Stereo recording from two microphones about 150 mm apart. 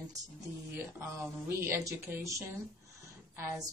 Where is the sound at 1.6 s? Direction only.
15° right (ahead or behind).